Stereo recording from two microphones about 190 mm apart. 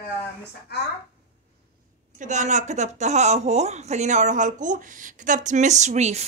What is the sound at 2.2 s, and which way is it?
A woman's voice, 40° right (ahead or behind).